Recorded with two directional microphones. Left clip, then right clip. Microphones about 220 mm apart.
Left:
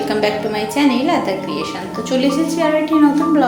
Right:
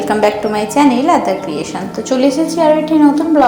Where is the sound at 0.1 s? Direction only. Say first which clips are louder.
Right 7 dB; 20° right (ahead or behind).